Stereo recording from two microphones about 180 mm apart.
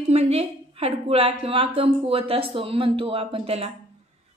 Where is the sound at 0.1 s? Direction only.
35° right (ahead or behind).